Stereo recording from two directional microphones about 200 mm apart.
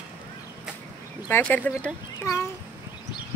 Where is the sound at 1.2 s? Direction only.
10° left (ahead or behind).